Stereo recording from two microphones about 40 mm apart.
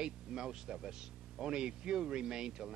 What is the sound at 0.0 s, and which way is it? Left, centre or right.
Speech, centre.